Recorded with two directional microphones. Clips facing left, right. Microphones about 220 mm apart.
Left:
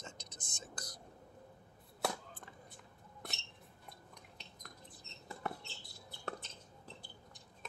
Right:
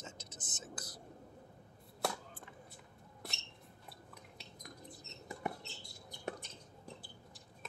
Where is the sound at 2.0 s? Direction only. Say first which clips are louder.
Even; centre (ahead or behind).